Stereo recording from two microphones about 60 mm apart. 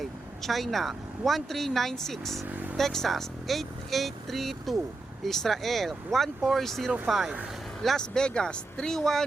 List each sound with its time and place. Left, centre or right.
0.0 s speech: centre
2.5 s vehicle: right
2.7 s speech: centre
7.9 s speech: centre